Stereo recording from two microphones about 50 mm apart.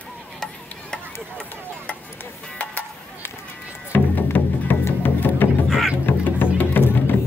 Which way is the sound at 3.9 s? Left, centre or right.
Left.